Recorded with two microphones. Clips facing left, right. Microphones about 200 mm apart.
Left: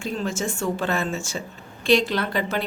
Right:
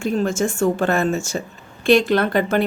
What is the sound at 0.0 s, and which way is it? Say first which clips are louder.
A woman's voice: right 7 dB; 50° right (ahead or behind).